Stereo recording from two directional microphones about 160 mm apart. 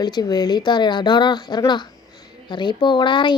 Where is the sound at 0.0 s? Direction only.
25° left (ahead or behind).